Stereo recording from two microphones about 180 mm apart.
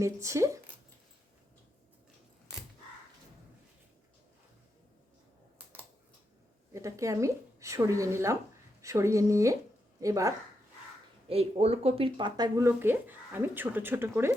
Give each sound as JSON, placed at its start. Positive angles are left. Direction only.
{"t": 0.0, "sound": "a woman's voice", "side_deg": -15}
{"t": 6.7, "sound": "a woman's voice", "side_deg": -15}
{"t": 11.3, "sound": "speech", "side_deg": -35}